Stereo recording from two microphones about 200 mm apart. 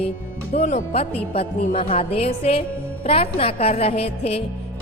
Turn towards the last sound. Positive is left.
turn(degrees=30)  # may be behind; listen again after turning